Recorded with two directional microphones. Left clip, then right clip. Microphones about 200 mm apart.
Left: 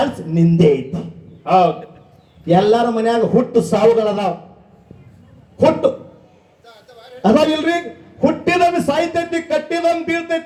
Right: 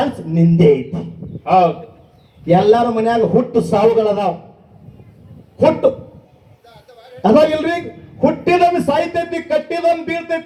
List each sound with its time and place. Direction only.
0.3 s a man's voice: 30° right (ahead or behind)
5.5 s a man's voice: 30° right (ahead or behind)
6.7 s a sound: 35° right (ahead or behind)
8.2 s a man's voice: 30° right (ahead or behind)